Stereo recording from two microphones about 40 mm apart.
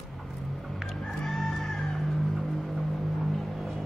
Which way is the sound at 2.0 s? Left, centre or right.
Centre.